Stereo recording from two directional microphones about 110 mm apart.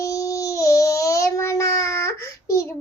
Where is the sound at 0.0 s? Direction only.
30° left (ahead or behind).